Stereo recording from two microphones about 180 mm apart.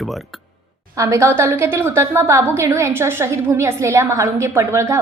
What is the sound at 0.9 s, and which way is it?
A woman's voice, 15° right (ahead or behind).